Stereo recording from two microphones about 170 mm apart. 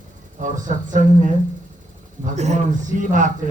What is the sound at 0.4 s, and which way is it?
Speech, 50° right (ahead or behind).